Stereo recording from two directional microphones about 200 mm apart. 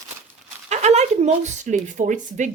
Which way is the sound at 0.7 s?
35° right (ahead or behind).